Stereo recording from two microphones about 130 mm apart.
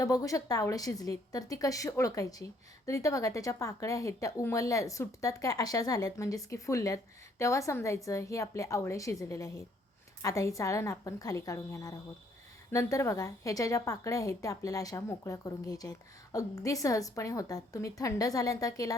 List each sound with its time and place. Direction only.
0.0 s a woman's voice: 25° left (ahead or behind)